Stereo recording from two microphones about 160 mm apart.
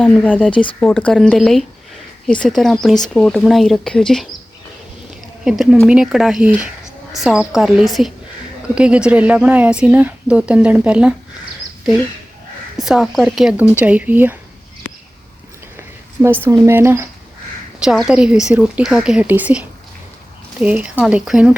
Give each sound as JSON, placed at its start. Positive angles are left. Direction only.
{"t": 0.0, "sound": "speech", "side_deg": 5}
{"t": 5.9, "sound": "speech", "side_deg": -5}
{"t": 12.8, "sound": "speech", "side_deg": 0}
{"t": 16.2, "sound": "speech", "side_deg": -15}
{"t": 17.7, "sound": "speech", "side_deg": -5}